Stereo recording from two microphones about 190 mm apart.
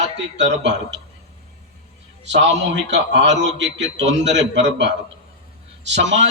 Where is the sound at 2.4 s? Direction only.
65° right (ahead or behind).